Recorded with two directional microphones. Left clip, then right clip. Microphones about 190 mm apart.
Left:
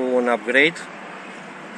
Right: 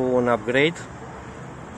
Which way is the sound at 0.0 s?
5° right (ahead or behind).